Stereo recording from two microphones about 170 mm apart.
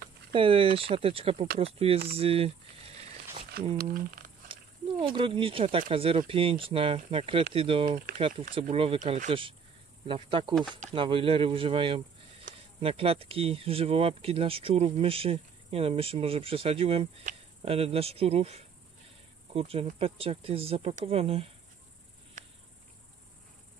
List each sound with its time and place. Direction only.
0.3 s speech: 30° right (ahead or behind)
2.1 s boiling: 35° right (ahead or behind)
3.6 s speech: 65° right (ahead or behind)
3.9 s speech: 55° right (ahead or behind)
4.5 s speech: 30° right (ahead or behind)
9.3 s speech: 30° right (ahead or behind)